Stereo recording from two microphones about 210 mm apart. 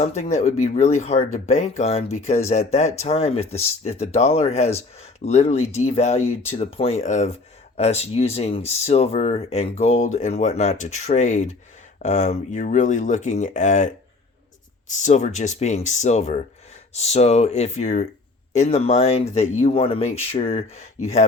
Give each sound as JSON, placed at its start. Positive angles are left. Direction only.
{"t": 0.0, "sound": "speech", "side_deg": 30}